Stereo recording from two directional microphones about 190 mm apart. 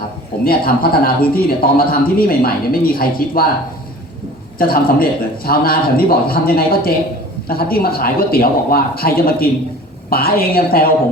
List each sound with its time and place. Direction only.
0.4 s a man's voice: 50° left (ahead or behind)
4.5 s a man's voice: 50° left (ahead or behind)